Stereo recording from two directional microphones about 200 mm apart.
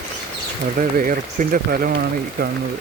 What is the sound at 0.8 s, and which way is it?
Speech, 45° right (ahead or behind).